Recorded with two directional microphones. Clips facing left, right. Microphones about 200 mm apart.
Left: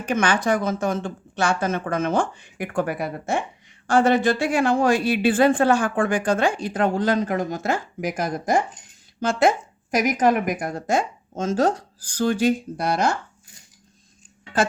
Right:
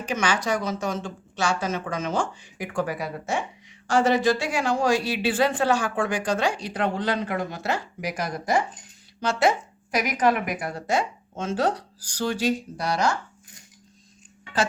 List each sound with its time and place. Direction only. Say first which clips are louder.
0.0 s a woman's voice: left 4 dB; 55° left (ahead or behind)